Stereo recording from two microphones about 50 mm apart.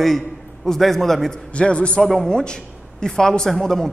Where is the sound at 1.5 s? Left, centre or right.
Left.